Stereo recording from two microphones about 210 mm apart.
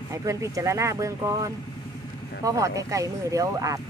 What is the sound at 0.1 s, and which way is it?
Speech, 15° right (ahead or behind).